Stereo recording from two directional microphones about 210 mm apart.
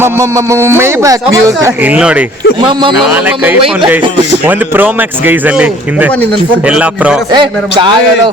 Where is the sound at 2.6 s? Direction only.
25° right (ahead or behind).